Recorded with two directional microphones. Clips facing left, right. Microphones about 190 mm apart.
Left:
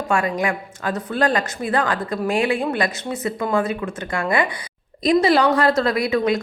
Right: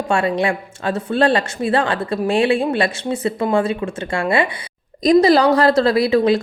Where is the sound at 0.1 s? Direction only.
30° right (ahead or behind).